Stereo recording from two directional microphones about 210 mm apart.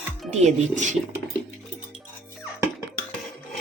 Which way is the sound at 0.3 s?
35° right (ahead or behind).